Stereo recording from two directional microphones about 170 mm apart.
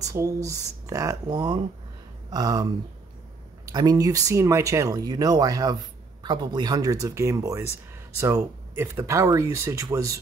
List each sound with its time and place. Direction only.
0.0 s speech: 20° right (ahead or behind)